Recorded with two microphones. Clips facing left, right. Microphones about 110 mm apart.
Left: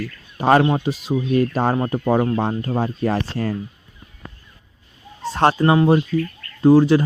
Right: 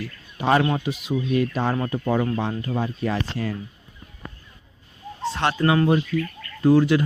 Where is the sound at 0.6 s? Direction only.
30° left (ahead or behind).